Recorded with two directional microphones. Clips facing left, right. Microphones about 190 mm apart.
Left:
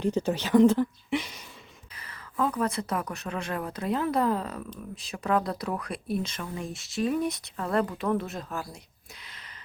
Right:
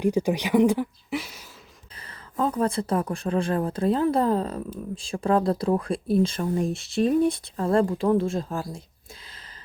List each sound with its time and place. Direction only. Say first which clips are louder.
0.0 s speech: right 4 dB; 10° right (ahead or behind)
2.0 s speech: right 2 dB; 30° right (ahead or behind)